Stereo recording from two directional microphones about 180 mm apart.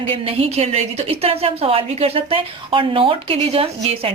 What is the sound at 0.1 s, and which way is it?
A woman's voice, 30° right (ahead or behind).